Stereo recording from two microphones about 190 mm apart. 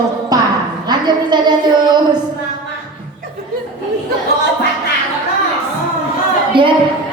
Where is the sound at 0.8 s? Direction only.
20° right (ahead or behind).